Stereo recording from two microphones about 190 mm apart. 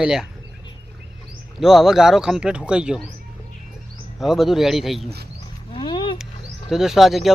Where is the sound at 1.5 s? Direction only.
Centre (ahead or behind).